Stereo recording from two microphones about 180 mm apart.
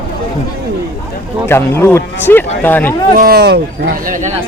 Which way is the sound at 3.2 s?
60° right (ahead or behind).